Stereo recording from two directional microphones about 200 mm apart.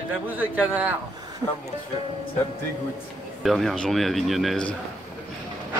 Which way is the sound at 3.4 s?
Centre (ahead or behind).